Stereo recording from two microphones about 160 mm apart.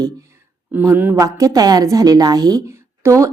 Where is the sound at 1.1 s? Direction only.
20° right (ahead or behind).